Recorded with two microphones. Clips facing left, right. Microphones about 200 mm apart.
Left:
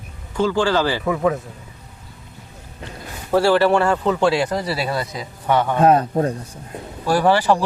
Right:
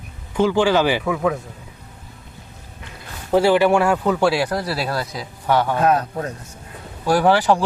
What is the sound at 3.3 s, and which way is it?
Speech, 15° right (ahead or behind).